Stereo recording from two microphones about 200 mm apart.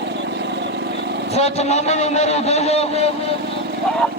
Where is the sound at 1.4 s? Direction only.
30° left (ahead or behind).